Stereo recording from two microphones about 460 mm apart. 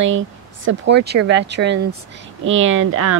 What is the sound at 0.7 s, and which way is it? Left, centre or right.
Speech, right.